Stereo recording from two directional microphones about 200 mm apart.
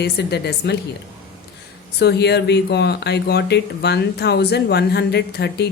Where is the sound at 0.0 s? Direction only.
55° left (ahead or behind).